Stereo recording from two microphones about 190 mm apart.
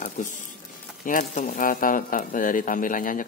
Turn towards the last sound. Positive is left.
turn(degrees=45)  # may be behind; listen again after turning